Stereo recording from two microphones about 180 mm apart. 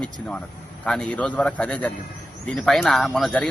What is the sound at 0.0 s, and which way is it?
A man's voice, 5° left (ahead or behind).